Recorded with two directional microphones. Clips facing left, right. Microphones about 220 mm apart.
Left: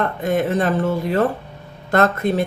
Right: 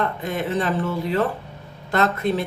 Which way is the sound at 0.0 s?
50° left (ahead or behind).